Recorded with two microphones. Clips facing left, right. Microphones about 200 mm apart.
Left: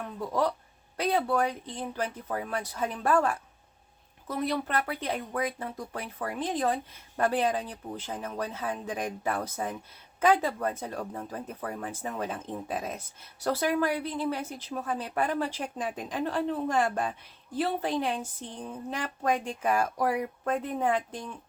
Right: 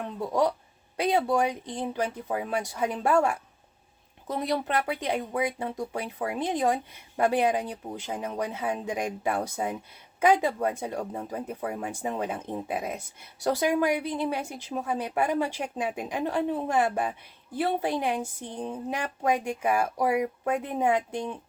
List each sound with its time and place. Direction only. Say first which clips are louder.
0.3 s speech: right 3 dB; 15° right (ahead or behind)